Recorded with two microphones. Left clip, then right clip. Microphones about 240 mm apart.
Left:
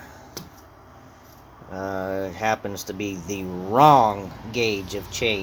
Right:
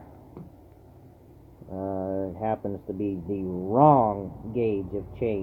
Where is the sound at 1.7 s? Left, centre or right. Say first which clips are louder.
Left 3 dB; centre.